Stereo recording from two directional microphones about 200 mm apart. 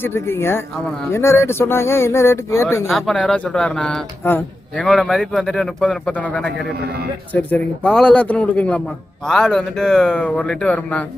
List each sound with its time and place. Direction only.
0.0 s speech: 10° left (ahead or behind)
2.8 s speech: centre (ahead or behind)
6.7 s speech: 55° right (ahead or behind)
7.3 s speech: 5° left (ahead or behind)